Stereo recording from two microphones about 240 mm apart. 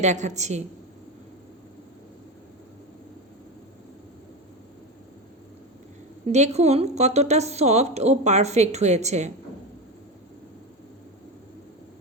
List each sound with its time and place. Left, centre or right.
0.0 s a woman's voice: right
6.2 s a woman's voice: right